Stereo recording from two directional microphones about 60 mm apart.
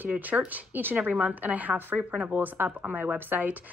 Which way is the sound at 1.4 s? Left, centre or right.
Right.